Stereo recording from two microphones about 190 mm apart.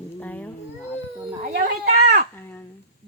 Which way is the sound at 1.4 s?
55° right (ahead or behind).